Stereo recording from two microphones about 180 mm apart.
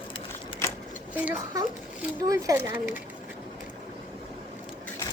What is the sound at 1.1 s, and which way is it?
A woman's voice, 10° right (ahead or behind).